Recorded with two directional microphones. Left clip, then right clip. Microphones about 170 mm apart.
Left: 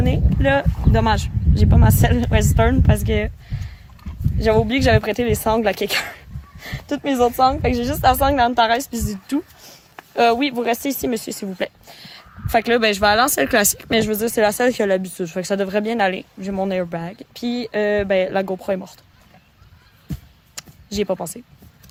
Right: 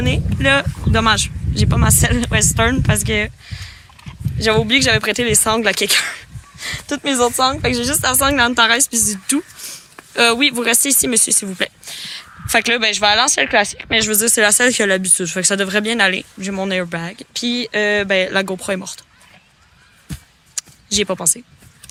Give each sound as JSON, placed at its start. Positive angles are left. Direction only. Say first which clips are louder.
{"t": 0.0, "sound": "speech", "louder": "right 3 dB", "side_deg": -5}
{"t": 8.0, "sound": "speech", "louder": "left 1 dB", "side_deg": 15}
{"t": 12.8, "sound": "speech", "louder": "right 1 dB", "side_deg": -40}
{"t": 14.1, "sound": "speech", "louder": "right 3 dB", "side_deg": 0}
{"t": 20.6, "sound": "a sound", "louder": "right 5 dB", "side_deg": 0}